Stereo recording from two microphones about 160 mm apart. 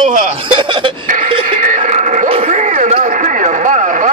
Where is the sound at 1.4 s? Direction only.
55° right (ahead or behind).